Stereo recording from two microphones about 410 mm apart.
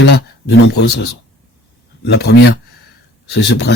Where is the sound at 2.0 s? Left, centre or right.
Left.